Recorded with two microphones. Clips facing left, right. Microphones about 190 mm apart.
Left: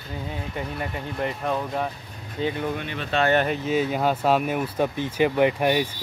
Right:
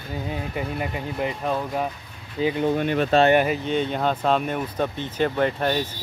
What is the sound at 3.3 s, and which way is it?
Speech, 10° right (ahead or behind).